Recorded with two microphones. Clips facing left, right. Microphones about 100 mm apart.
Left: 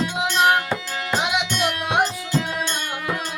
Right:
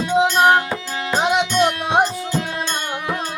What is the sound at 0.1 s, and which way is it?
Music, 35° right (ahead or behind).